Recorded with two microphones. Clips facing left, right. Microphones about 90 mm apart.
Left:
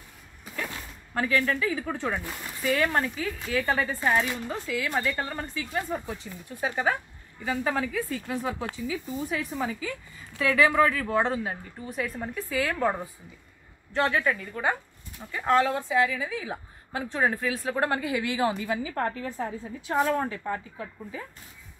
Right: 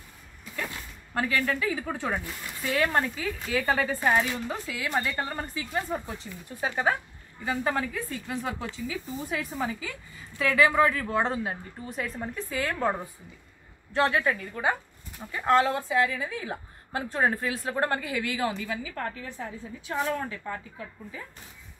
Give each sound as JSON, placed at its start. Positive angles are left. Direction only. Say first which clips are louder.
{"t": 1.1, "sound": "speech", "louder": "left 1 dB", "side_deg": -5}
{"t": 13.9, "sound": "speech", "louder": "even", "side_deg": 0}
{"t": 17.0, "sound": "speech", "louder": "even", "side_deg": -5}
{"t": 17.6, "sound": "a woman's voice", "louder": "left 1 dB", "side_deg": 10}
{"t": 19.9, "sound": "a woman's voice", "louder": "left 4 dB", "side_deg": 25}